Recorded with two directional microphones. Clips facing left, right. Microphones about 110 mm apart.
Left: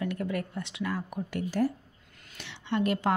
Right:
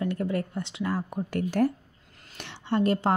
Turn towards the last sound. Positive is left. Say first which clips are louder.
# right 3 dB
turn(degrees=-35)  # may be behind; listen again after turning